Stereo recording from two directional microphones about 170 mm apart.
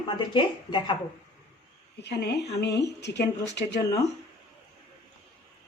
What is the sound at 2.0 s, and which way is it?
A woman's voice, 80° left.